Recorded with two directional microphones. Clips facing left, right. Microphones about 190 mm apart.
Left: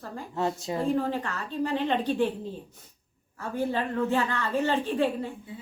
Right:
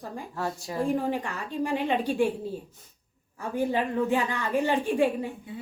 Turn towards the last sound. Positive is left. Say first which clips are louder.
# right 2 dB
turn(degrees=-10)  # may be behind; listen again after turning